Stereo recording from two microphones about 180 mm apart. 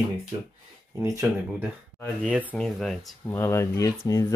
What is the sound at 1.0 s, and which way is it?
Speech, 15° right (ahead or behind).